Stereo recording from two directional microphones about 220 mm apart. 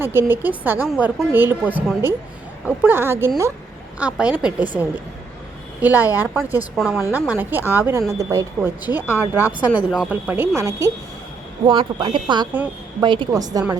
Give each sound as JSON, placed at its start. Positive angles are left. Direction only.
{"t": 0.0, "sound": "a woman's voice", "side_deg": -10}
{"t": 5.8, "sound": "a woman's voice", "side_deg": -10}